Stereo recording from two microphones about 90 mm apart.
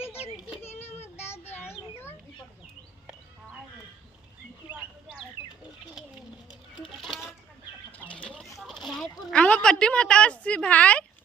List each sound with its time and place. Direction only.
1.3 s child singing: 25° left (ahead or behind)
4.7 s bird: 20° right (ahead or behind)
5.4 s bird: 30° right (ahead or behind)
6.8 s a sound: centre (ahead or behind)
7.9 s chicken: 15° left (ahead or behind)
8.8 s a sound: 5° left (ahead or behind)